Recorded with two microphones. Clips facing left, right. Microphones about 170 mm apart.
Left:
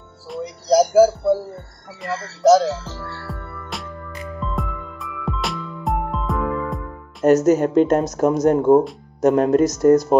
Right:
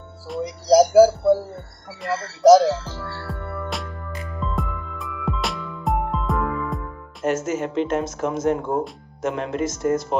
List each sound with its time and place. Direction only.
0.3 s speech: 5° right (ahead or behind)
2.4 s speech: 15° right (ahead or behind)
3.3 s music: centre (ahead or behind)
7.2 s speech: 40° left (ahead or behind)